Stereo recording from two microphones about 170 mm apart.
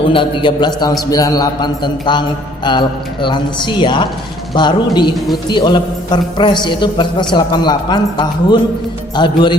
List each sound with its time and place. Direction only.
0.1 s a man's voice: 30° left (ahead or behind)